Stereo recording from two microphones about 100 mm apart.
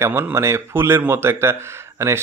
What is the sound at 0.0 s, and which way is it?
Speech, 25° right (ahead or behind).